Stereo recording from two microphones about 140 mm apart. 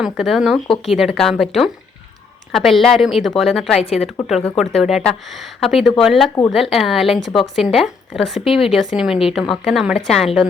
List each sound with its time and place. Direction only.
0.0 s speech: 5° right (ahead or behind)
3.8 s a woman's voice: 45° left (ahead or behind)
4.5 s speech: centre (ahead or behind)